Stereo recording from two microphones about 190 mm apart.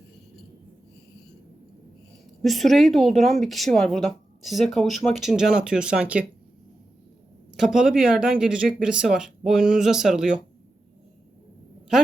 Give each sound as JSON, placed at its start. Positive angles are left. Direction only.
{"t": 2.4, "sound": "speech", "side_deg": 0}
{"t": 7.5, "sound": "speech", "side_deg": -5}